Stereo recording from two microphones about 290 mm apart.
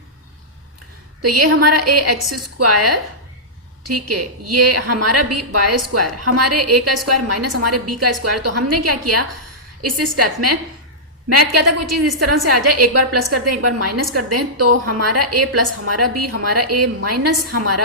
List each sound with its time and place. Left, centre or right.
1.2 s a woman's voice: right
3.8 s a woman's voice: right
11.6 s a woman's voice: right